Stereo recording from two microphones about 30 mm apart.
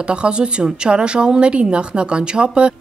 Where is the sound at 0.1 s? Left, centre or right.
Right.